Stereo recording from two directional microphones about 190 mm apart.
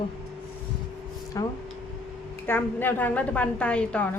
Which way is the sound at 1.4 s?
15° left (ahead or behind).